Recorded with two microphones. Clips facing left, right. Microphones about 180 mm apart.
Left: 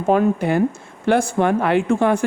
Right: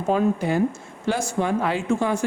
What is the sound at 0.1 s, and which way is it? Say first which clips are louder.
Speech: left 4 dB; 60° left (ahead or behind).